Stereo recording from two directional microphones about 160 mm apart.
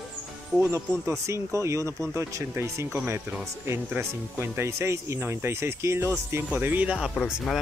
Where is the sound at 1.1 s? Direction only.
20° right (ahead or behind).